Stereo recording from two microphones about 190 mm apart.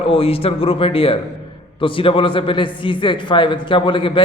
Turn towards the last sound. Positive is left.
turn(degrees=25)  # may be behind; listen again after turning